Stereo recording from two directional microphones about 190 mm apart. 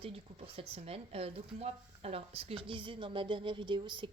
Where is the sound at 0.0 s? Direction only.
30° right (ahead or behind).